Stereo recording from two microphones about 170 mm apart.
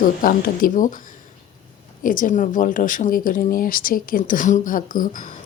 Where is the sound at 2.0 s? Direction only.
50° left (ahead or behind).